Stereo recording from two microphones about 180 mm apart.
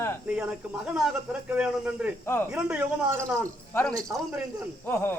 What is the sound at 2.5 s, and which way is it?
Speech, 5° right (ahead or behind).